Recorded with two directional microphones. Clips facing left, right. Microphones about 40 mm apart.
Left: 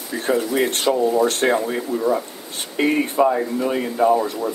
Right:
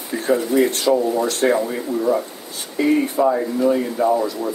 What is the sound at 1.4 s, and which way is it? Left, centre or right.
Speech, left.